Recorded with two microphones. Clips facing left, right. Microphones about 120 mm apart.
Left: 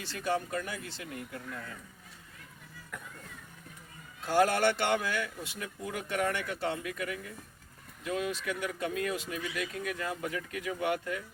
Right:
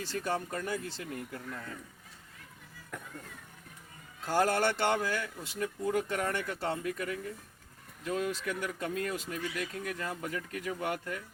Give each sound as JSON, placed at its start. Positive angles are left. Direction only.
{"t": 0.0, "sound": "speech", "side_deg": -40}
{"t": 4.4, "sound": "speech", "side_deg": -35}